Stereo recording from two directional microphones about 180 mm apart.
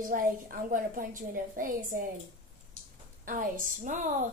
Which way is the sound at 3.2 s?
50° right (ahead or behind).